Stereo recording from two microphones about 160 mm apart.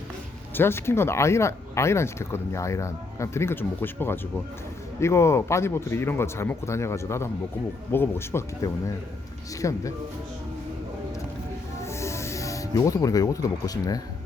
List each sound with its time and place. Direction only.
0.5 s speech: 15° left (ahead or behind)
11.8 s music: 15° left (ahead or behind)